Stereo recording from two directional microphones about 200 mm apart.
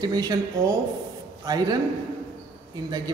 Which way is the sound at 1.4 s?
20° right (ahead or behind).